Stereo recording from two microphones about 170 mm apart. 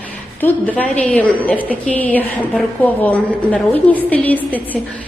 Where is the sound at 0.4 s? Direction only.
10° left (ahead or behind).